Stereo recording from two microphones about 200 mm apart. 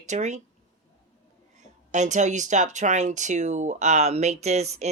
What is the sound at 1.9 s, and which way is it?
Speech, 35° right (ahead or behind).